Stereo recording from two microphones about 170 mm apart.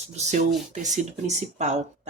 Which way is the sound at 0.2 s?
45° right (ahead or behind).